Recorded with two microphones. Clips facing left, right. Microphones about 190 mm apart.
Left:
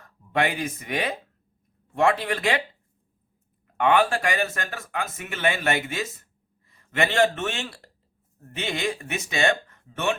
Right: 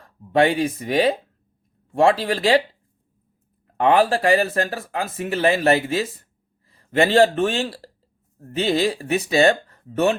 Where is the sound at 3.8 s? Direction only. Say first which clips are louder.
Right 4 dB; 35° right (ahead or behind).